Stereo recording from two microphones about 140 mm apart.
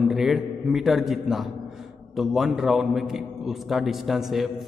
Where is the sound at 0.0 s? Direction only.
5° right (ahead or behind).